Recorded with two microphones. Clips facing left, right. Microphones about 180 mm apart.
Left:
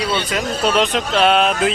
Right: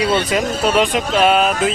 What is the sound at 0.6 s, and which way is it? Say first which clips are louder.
Speech: left 1 dB; 10° right (ahead or behind).